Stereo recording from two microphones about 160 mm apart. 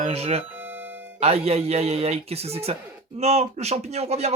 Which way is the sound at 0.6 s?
10° right (ahead or behind).